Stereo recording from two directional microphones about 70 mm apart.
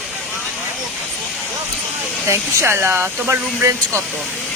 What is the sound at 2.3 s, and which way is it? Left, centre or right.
Speech, right.